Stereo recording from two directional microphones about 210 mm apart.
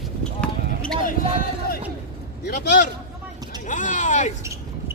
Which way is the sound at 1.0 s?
40° left (ahead or behind).